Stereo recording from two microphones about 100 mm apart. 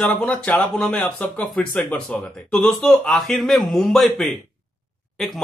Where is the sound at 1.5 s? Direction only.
5° left (ahead or behind).